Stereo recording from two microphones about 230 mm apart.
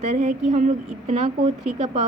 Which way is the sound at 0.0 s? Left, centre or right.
Right.